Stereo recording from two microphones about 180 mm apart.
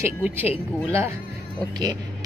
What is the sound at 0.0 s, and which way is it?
Speech, 10° right (ahead or behind).